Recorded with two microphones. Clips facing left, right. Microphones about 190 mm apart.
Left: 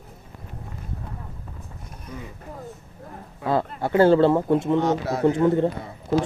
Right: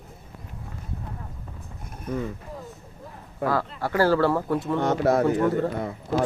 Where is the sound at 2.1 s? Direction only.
50° right (ahead or behind).